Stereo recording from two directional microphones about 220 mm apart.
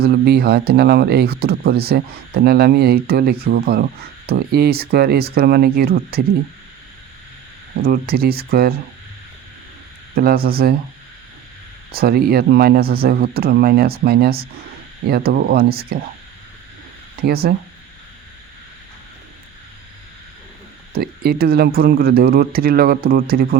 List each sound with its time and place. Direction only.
0.0 s speech: 45° right (ahead or behind)
7.8 s speech: 45° right (ahead or behind)
10.2 s speech: 45° right (ahead or behind)
11.9 s speech: 45° right (ahead or behind)
17.2 s speech: 45° right (ahead or behind)
20.9 s speech: 45° right (ahead or behind)